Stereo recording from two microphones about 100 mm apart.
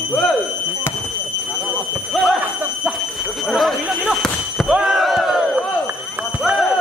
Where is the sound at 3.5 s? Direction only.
Centre (ahead or behind).